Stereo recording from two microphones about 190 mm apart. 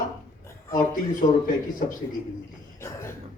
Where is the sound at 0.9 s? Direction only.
45° left (ahead or behind).